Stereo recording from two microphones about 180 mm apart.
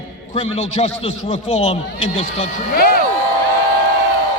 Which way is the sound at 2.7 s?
55° left (ahead or behind).